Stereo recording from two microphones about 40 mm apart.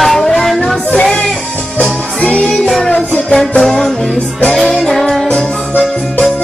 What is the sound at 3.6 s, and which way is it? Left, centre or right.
Music, centre.